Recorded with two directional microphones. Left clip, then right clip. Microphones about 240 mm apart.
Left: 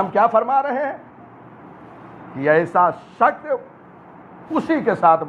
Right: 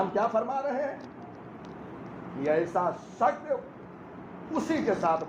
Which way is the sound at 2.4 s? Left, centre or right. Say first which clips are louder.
Left 11 dB; left.